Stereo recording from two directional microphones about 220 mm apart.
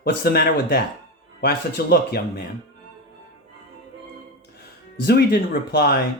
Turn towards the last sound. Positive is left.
turn(degrees=45)  # may be behind; listen again after turning